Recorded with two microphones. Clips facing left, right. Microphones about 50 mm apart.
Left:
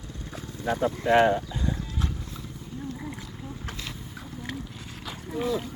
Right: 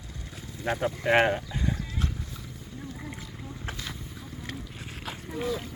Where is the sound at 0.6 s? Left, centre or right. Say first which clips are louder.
Left 2 dB; right.